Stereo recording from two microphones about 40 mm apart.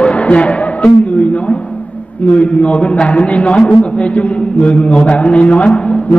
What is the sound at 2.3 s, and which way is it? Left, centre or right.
A man's voice, left.